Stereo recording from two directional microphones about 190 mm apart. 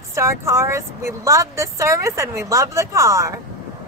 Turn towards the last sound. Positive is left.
turn(degrees=-15)  # may be behind; listen again after turning